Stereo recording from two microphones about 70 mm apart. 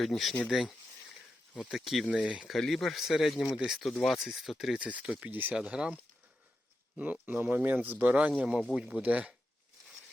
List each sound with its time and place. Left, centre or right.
0.0 s speech: centre
1.7 s speech: centre
2.5 s speech: centre
4.8 s speech: centre
5.5 s speech: centre
8.7 s speech: centre